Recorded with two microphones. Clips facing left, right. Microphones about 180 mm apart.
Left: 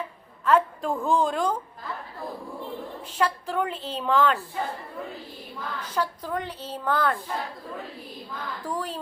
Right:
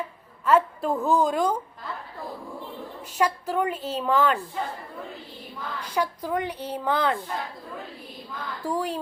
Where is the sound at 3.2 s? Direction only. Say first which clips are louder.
Right 2 dB; 10° right (ahead or behind).